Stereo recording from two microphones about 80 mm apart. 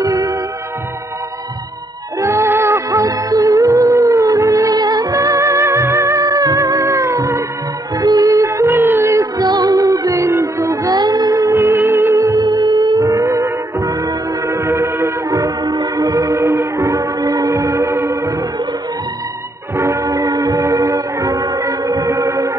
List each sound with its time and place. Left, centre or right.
0.0 s music: right
2.1 s music: right
9.1 s music: right
9.5 s music: right
12.4 s music: right
15.3 s music: right
19.8 s music: right